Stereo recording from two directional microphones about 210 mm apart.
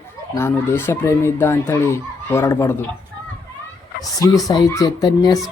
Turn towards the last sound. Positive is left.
turn(degrees=15)  # may be behind; listen again after turning